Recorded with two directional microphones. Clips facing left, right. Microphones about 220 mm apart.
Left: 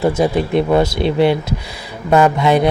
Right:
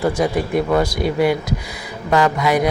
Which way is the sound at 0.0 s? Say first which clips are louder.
Left 3 dB; 25° left (ahead or behind).